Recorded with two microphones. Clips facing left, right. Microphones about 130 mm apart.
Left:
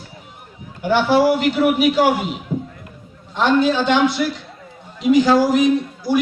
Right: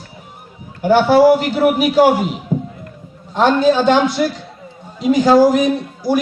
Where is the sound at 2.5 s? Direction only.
40° right (ahead or behind).